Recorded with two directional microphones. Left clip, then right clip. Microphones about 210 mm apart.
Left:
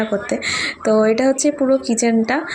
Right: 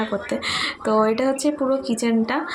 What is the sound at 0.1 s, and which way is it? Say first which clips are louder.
Speech: left 4 dB; 10° left (ahead or behind).